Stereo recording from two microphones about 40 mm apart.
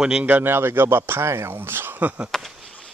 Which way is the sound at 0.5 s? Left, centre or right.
Right.